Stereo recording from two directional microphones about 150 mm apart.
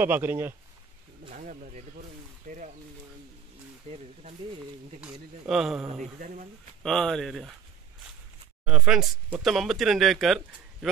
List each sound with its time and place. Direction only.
0.0 s speech: 15° right (ahead or behind)
1.3 s speech: 60° right (ahead or behind)
3.9 s speech: 50° right (ahead or behind)
5.0 s speech: 5° right (ahead or behind)
6.1 s speech: 60° right (ahead or behind)
6.8 s speech: 5° left (ahead or behind)
8.6 s speech: 5° right (ahead or behind)